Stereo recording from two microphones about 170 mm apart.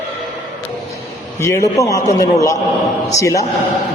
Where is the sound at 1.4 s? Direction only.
20° left (ahead or behind).